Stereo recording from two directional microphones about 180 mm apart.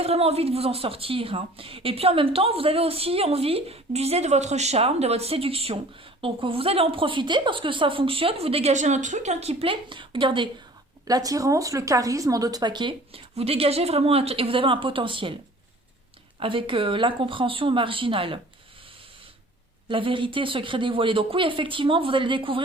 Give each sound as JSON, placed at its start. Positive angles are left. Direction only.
{"t": 0.0, "sound": "a woman's voice", "side_deg": -35}
{"t": 16.4, "sound": "speech", "side_deg": -30}
{"t": 19.9, "sound": "speech", "side_deg": -30}